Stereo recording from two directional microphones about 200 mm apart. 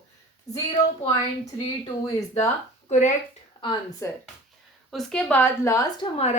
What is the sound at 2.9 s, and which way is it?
Speech, 35° left (ahead or behind).